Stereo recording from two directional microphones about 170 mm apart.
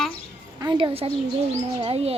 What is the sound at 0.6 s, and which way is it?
A child's voice, 25° right (ahead or behind).